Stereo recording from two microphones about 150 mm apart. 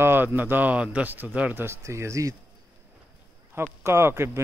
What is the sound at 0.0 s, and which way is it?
Speech, 15° right (ahead or behind).